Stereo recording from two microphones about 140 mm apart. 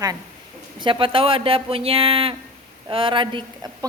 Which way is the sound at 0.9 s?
40° right (ahead or behind).